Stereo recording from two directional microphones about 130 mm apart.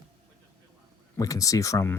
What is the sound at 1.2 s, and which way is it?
Speech, 25° left (ahead or behind).